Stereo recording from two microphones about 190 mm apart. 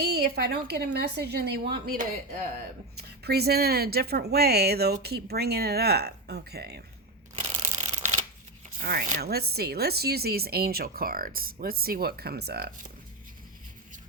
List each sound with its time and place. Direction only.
0.0 s speech: 55° right (ahead or behind)
7.3 s shuffling cards: 35° right (ahead or behind)
8.8 s speech: 45° right (ahead or behind)